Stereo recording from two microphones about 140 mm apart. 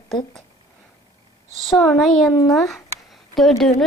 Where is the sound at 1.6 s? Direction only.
Centre (ahead or behind).